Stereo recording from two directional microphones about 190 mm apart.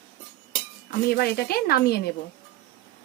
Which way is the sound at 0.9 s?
55° left (ahead or behind).